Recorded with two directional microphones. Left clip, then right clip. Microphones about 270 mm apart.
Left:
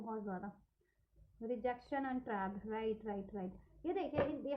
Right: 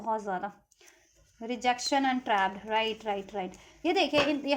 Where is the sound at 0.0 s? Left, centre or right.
Right.